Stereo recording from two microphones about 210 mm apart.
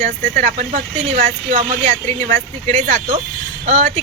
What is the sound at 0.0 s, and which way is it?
Speech, 35° right (ahead or behind).